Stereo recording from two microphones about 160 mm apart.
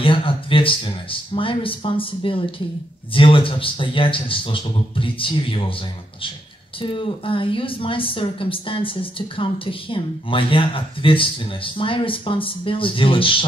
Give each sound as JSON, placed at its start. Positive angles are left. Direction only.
{"t": 0.0, "sound": "a woman's voice", "side_deg": 35}